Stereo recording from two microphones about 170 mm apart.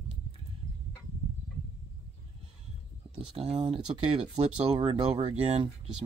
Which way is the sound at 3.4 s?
35° right (ahead or behind).